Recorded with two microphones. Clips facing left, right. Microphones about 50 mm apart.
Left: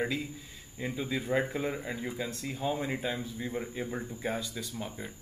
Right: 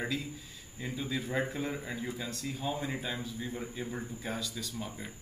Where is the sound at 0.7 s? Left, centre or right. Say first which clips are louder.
Left 2 dB; centre.